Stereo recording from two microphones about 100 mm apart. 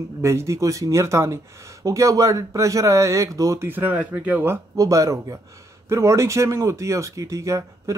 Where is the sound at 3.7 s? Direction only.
20° right (ahead or behind).